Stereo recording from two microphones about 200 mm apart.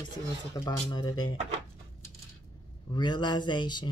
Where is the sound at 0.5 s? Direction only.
20° left (ahead or behind).